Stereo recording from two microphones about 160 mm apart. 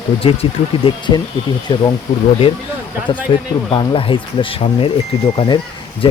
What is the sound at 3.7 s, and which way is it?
Speech, 35° left (ahead or behind).